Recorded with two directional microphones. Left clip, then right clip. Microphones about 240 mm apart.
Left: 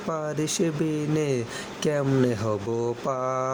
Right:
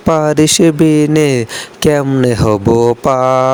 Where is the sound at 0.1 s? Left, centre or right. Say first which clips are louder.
Right 18 dB; right.